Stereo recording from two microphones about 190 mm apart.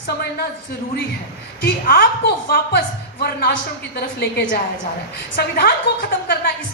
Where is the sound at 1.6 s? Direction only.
55° left (ahead or behind).